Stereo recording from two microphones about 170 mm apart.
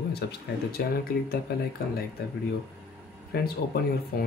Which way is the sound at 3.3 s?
65° left (ahead or behind).